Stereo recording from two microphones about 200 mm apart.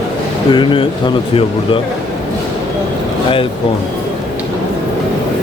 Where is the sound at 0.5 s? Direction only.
25° left (ahead or behind).